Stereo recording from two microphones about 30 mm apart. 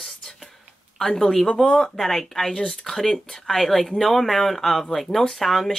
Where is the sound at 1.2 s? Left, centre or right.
Centre.